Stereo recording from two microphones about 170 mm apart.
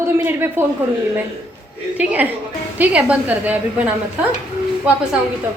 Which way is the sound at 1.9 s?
10° right (ahead or behind).